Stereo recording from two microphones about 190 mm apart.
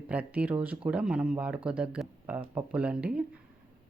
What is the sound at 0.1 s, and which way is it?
A woman's voice, 5° right (ahead or behind).